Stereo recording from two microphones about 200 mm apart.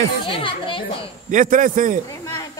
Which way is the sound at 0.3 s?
25° left (ahead or behind).